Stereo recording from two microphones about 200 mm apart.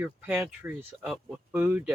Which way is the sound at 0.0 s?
10° right (ahead or behind).